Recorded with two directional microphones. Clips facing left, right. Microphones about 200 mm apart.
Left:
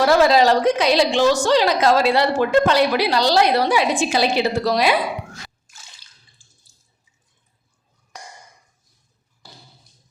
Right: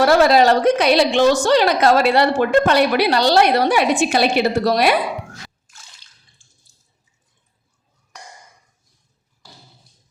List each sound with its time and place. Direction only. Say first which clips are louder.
0.2 s a woman's voice: right 1 dB; 60° right (ahead or behind)